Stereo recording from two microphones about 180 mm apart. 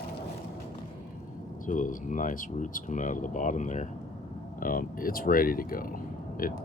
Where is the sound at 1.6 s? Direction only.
45° left (ahead or behind).